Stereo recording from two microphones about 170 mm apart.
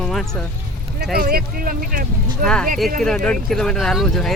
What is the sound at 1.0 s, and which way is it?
Speech, 65° right (ahead or behind).